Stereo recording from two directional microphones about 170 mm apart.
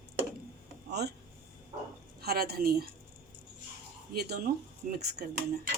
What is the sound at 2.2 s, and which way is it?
Speech, 65° right (ahead or behind).